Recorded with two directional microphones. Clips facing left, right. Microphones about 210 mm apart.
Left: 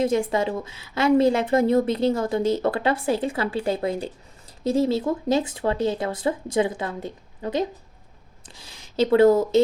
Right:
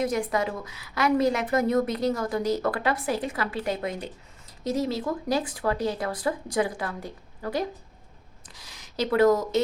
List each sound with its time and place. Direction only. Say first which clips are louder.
0.0 s a woman's voice: left 4 dB; 25° left (ahead or behind)